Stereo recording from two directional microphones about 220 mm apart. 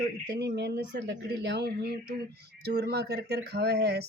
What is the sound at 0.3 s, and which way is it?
Speech, 50° right (ahead or behind).